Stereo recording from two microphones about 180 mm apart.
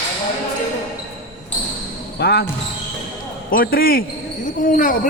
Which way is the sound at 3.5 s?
55° left (ahead or behind).